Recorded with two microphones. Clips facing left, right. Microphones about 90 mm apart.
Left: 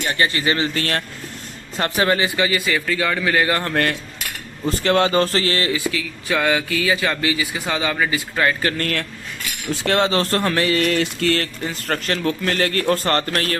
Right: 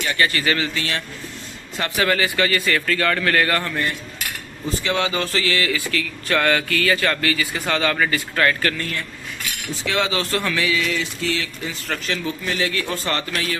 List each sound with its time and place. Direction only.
0.0 s speech: 30° left (ahead or behind)
0.7 s speech: 45° left (ahead or behind)
1.7 s speech: 30° left (ahead or behind); by 3.6 s 15° left (ahead or behind)
4.6 s a man's voice: 45° left (ahead or behind)
5.7 s speech: 15° left (ahead or behind)
8.8 s speech: 75° left (ahead or behind)
9.8 s speech: 45° left (ahead or behind)